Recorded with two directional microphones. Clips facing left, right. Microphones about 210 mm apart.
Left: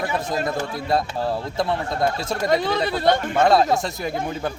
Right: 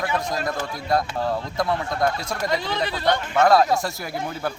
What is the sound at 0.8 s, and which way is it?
A man's voice, 25° left (ahead or behind).